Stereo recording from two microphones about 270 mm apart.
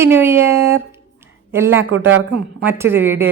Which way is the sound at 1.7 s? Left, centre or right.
Right.